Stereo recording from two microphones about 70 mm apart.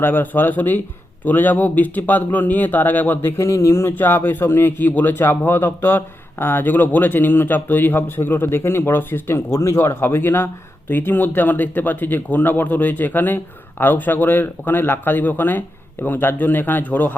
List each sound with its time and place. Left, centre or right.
0.0 s a man's voice: left
3.4 s speech: left
3.9 s a man's voice: left